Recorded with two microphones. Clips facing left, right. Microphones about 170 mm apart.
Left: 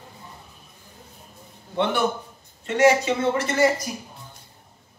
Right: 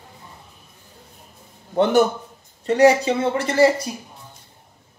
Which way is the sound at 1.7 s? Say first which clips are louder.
Right 6 dB; 40° right (ahead or behind).